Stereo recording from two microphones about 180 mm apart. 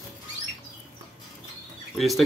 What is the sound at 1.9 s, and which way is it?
Speech, centre (ahead or behind).